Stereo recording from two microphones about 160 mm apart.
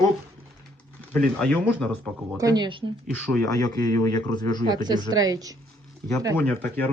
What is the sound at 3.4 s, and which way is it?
Speech, 25° left (ahead or behind).